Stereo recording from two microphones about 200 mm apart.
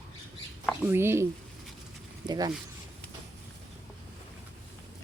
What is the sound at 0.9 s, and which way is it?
Speech, 10° right (ahead or behind).